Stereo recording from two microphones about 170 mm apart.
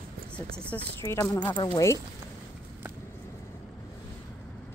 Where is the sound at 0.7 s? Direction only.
15° left (ahead or behind).